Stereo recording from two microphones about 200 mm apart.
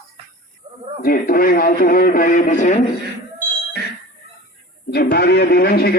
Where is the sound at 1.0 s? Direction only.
45° left (ahead or behind).